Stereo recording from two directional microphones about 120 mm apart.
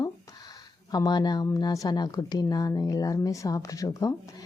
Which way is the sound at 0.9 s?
35° left (ahead or behind).